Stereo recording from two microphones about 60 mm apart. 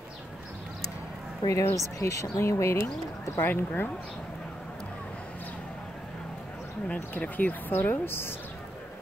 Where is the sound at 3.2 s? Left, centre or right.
Left.